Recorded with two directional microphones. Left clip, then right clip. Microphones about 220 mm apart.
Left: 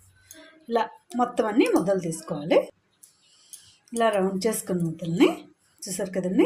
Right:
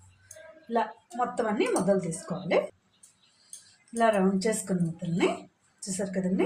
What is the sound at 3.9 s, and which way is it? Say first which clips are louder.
Speech: left 1 dB; 40° left (ahead or behind).